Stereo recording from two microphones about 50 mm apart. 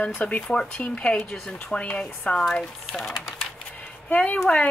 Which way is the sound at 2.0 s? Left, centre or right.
Centre.